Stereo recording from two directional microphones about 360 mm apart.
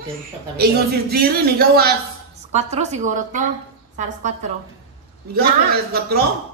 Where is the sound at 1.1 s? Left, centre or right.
Right.